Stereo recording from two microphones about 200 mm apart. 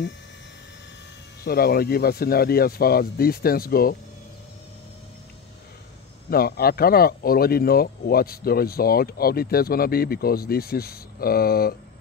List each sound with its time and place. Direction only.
1.4 s speech: 50° left (ahead or behind)
6.3 s speech: 50° left (ahead or behind)